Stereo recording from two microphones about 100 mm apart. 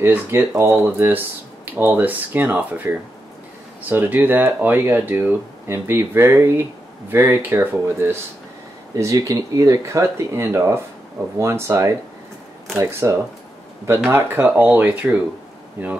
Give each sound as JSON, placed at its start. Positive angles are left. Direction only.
{"t": 0.0, "sound": "speech", "side_deg": -20}
{"t": 8.9, "sound": "speech", "side_deg": -35}